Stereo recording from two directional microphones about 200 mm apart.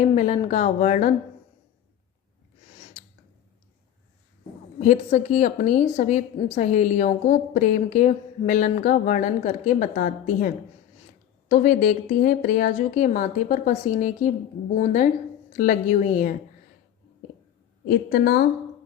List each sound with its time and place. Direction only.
0.0 s a woman's voice: 35° left (ahead or behind)
4.8 s a woman's voice: 35° left (ahead or behind)
17.8 s speech: 55° left (ahead or behind)